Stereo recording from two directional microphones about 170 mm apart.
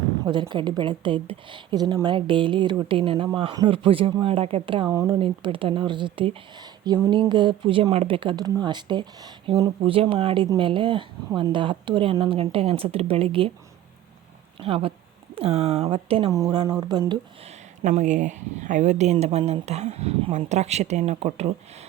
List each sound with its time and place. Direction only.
0.3 s speech: 25° right (ahead or behind)
14.6 s speech: 35° right (ahead or behind)
17.8 s speech: 45° right (ahead or behind)